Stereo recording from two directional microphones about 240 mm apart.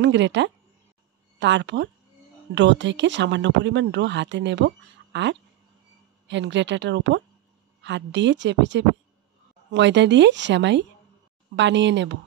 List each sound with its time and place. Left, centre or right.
0.0 s speech: right